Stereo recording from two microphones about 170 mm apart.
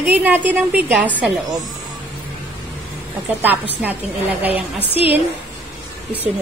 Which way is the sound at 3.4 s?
10° right (ahead or behind).